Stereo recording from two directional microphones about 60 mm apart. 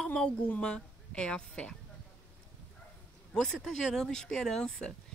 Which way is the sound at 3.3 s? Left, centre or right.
Centre.